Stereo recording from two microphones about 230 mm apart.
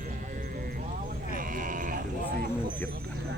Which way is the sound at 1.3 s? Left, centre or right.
Right.